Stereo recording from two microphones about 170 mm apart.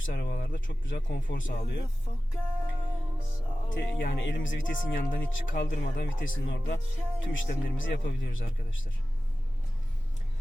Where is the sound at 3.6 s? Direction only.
55° left (ahead or behind).